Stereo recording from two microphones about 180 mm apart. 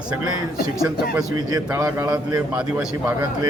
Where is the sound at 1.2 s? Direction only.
20° right (ahead or behind).